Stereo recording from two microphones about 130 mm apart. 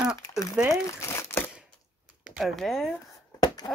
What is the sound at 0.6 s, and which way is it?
Speech, 10° right (ahead or behind).